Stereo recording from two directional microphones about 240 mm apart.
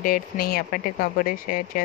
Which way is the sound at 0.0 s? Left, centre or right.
Left.